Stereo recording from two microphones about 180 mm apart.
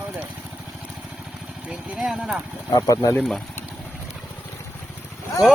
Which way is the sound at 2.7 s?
15° left (ahead or behind).